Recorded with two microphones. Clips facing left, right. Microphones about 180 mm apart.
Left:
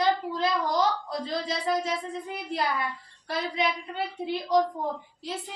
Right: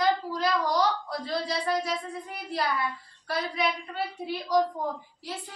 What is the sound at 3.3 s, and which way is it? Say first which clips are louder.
A woman's voice: even; 20° left (ahead or behind).